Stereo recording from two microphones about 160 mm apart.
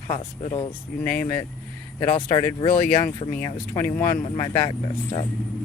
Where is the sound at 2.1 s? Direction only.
25° left (ahead or behind).